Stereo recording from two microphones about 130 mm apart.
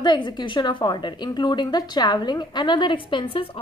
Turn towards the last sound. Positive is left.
turn(degrees=40)  # may be behind; listen again after turning